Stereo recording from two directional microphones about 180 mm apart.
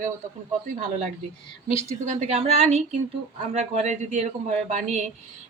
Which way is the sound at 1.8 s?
40° right (ahead or behind).